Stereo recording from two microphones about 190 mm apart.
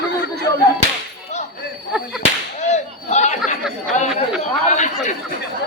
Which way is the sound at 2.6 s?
35° left (ahead or behind).